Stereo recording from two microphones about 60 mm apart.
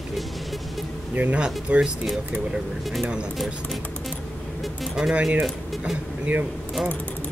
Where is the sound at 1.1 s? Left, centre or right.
Right.